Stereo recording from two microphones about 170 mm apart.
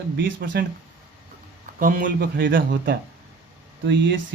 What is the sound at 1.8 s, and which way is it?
A man's voice, 50° right (ahead or behind).